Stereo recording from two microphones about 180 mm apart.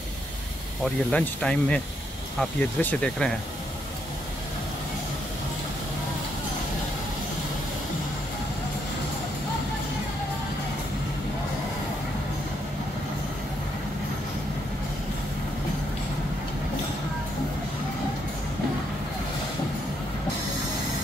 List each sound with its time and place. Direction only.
1.1 s speech: 5° left (ahead or behind)